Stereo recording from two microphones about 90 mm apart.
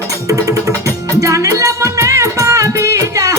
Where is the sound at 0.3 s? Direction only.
40° right (ahead or behind).